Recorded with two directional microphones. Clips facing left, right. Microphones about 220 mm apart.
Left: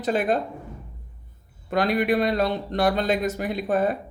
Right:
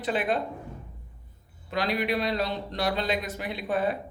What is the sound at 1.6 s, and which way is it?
Speech, 50° left (ahead or behind).